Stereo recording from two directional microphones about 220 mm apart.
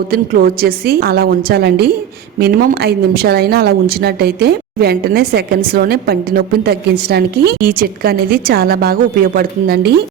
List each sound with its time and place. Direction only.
0.1 s a woman's voice: 45° right (ahead or behind)